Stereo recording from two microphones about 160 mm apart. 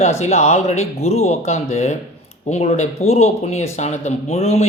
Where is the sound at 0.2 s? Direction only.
45° left (ahead or behind).